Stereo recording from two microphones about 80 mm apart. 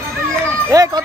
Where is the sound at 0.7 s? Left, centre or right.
Right.